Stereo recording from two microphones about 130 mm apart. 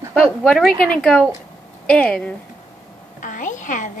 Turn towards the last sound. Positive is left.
turn(degrees=75)  # may be behind; listen again after turning